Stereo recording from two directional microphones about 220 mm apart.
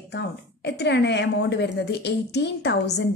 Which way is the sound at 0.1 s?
50° left (ahead or behind).